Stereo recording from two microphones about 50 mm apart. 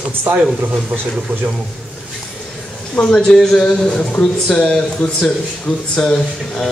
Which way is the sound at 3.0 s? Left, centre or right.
Centre.